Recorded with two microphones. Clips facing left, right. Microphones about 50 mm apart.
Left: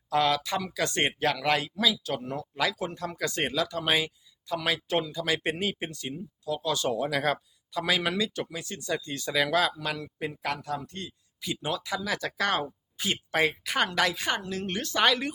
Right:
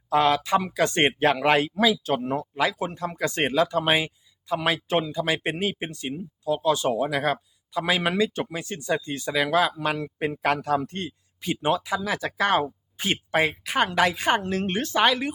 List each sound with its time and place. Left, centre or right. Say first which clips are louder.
0.1 s a man's voice: right 5 dB; right
5.9 s speech: right 4 dB; right
9.8 s a man's voice: right 6 dB; right
12.0 s speech: right 3 dB; right
13.0 s a man's voice: right 4 dB; right
13.5 s a woman's voice: right 4 dB; centre
13.9 s a man's voice: right 5 dB; right
14.8 s speech: right 4 dB; right
15.0 s a woman's voice: right 2 dB; centre